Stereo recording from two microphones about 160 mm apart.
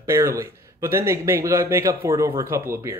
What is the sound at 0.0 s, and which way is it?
Speech, 15° right (ahead or behind).